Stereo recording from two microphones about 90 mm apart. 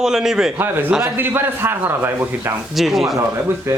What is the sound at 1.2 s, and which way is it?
A man's voice, 25° right (ahead or behind).